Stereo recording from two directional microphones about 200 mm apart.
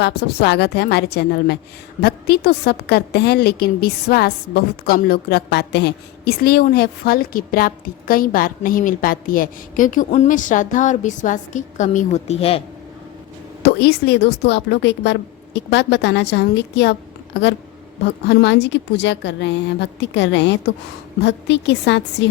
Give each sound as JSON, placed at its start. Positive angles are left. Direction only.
{"t": 0.0, "sound": "a woman's voice", "side_deg": 55}
{"t": 13.6, "sound": "a woman's voice", "side_deg": 55}
{"t": 18.3, "sound": "a woman's voice", "side_deg": 60}